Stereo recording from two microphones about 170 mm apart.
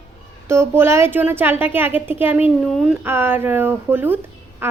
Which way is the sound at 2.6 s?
Centre (ahead or behind).